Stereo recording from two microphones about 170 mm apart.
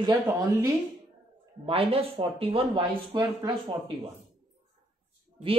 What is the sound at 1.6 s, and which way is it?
Speech, 35° right (ahead or behind).